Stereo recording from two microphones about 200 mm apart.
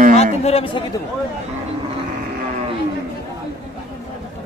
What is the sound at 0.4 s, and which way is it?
Speech, 30° left (ahead or behind).